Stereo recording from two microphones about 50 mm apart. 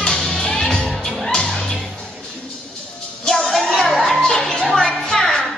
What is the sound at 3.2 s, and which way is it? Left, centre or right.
Music, centre.